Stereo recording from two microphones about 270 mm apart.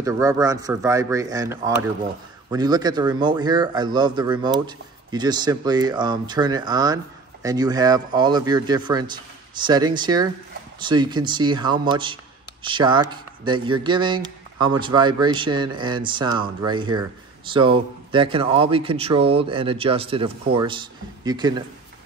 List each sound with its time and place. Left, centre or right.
0.0 s speech: centre